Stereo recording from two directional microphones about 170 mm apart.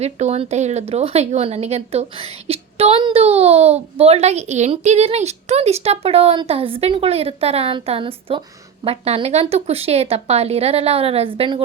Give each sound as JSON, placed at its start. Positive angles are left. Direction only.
{"t": 0.0, "sound": "a woman's voice", "side_deg": -40}